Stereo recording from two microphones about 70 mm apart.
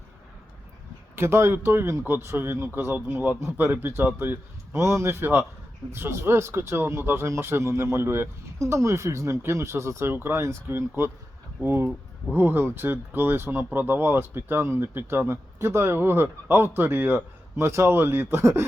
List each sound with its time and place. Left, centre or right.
1.1 s speech: right
5.9 s speech: right
12.3 s speech: right